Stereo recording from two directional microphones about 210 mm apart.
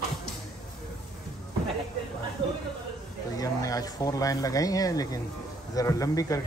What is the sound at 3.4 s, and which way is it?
Speech, 15° left (ahead or behind).